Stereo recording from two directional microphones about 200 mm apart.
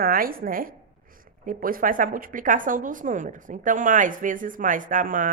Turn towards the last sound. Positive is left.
turn(degrees=-40)  # may be behind; listen again after turning